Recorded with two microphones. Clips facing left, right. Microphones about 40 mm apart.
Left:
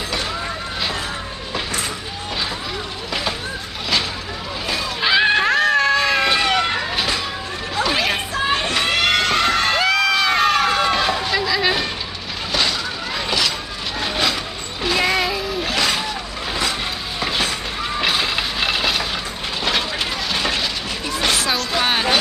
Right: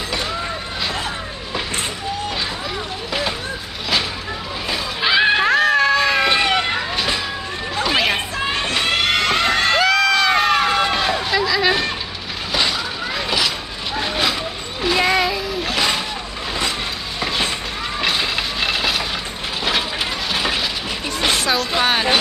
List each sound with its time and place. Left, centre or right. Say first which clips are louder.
4.6 s screaming: even; centre
6.3 s vehicle: even; centre
7.9 s chatter: right 3 dB; centre
8.7 s a sound: right 1 dB; centre
9.8 s run: right 2 dB; centre
13.9 s vehicle: right 1 dB; centre
14.8 s music: right 2 dB; centre
17.9 s train: even; centre
20.3 s ratchet: right 1 dB; centre
21.1 s vehicle: right 1 dB; centre